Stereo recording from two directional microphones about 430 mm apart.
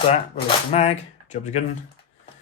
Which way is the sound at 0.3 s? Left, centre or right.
Centre.